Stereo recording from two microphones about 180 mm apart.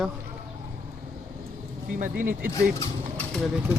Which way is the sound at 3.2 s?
5° left (ahead or behind).